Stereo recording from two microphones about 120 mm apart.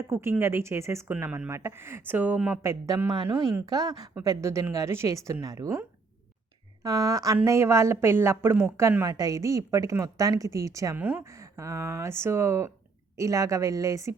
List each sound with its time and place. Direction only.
0.1 s a woman's voice: 20° right (ahead or behind)
3.7 s a woman's voice: 35° right (ahead or behind)
6.8 s a woman's voice: 30° right (ahead or behind)
10.9 s speech: 15° right (ahead or behind)
11.3 s a woman's voice: 25° right (ahead or behind)